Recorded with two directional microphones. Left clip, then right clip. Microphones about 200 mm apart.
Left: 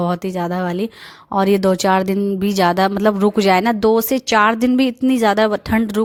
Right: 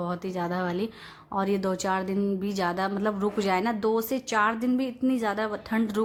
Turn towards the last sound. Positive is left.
turn(degrees=45)  # may be behind; listen again after turning